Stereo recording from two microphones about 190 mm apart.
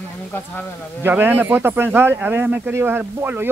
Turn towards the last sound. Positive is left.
turn(degrees=-10)  # may be behind; listen again after turning